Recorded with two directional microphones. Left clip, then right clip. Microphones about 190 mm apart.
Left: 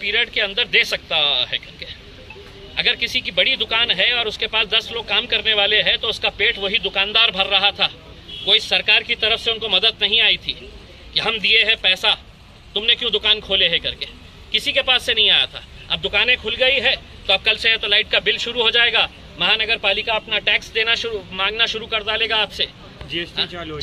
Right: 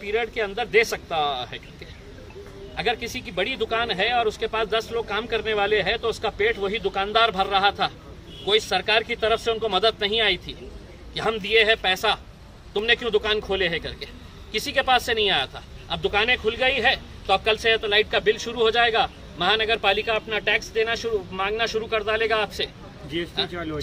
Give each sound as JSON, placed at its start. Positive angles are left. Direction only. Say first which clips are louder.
{"t": 0.0, "sound": "a man's voice", "louder": "left 6 dB", "side_deg": -5}
{"t": 3.3, "sound": "speech", "louder": "left 6 dB", "side_deg": -10}
{"t": 23.5, "sound": "speech", "louder": "left 1 dB", "side_deg": -35}